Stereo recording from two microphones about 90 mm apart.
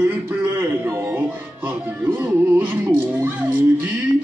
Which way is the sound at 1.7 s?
20° right (ahead or behind).